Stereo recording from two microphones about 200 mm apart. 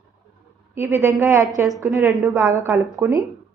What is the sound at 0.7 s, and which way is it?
A woman's voice, 10° right (ahead or behind).